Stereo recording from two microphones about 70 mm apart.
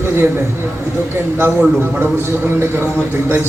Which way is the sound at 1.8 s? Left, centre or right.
Right.